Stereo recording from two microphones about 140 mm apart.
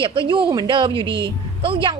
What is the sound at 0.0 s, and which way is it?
A woman's voice, 35° right (ahead or behind).